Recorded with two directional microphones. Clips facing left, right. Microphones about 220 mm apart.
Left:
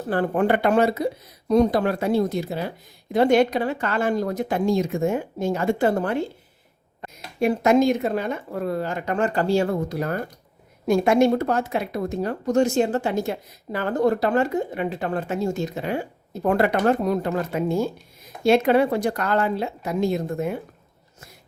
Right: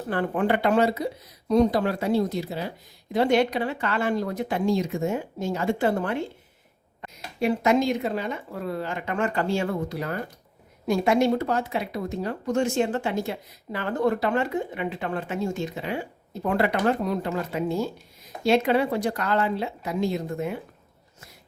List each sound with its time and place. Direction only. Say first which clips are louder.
0.1 s speech: left 3 dB; 40° left (ahead or behind)